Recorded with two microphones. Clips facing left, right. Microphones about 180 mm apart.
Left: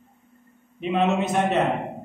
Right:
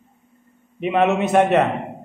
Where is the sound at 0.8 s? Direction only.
65° right (ahead or behind).